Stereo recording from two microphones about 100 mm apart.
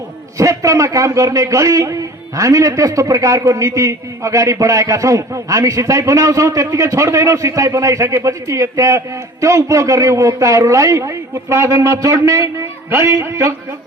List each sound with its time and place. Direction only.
0.3 s a man's voice: 30° right (ahead or behind)